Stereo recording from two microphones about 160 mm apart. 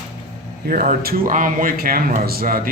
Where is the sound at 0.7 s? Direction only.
65° right (ahead or behind).